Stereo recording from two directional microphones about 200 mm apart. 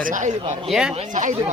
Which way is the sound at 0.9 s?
35° right (ahead or behind).